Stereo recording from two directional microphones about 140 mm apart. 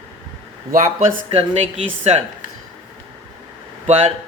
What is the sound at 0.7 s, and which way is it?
Speech, 75° right (ahead or behind).